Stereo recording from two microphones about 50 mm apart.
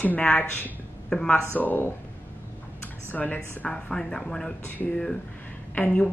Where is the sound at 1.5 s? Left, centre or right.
Left.